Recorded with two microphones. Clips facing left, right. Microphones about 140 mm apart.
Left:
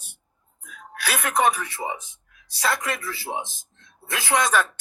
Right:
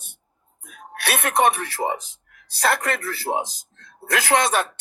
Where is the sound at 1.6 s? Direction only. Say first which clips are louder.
Right 5 dB; 75° right (ahead or behind).